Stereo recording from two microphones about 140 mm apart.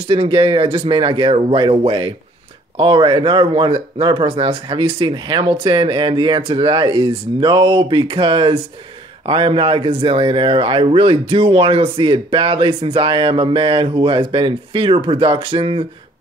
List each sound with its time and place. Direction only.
0.0 s speech: 40° right (ahead or behind)